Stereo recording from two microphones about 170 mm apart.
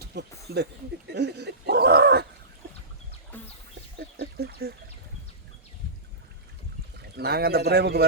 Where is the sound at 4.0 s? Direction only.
75° right (ahead or behind).